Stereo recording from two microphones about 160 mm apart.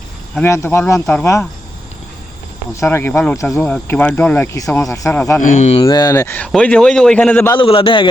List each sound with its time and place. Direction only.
0.4 s speech: 15° left (ahead or behind)
2.8 s speech: 15° left (ahead or behind)
5.4 s speech: 50° left (ahead or behind)
5.8 s a man's voice: 25° left (ahead or behind); by 7.5 s 10° left (ahead or behind)
7.5 s a man's voice: 35° left (ahead or behind)